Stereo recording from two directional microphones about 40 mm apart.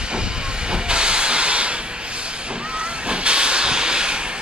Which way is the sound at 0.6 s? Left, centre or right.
Right.